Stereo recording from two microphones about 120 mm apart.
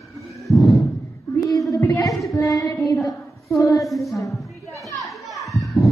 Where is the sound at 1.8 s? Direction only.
20° left (ahead or behind).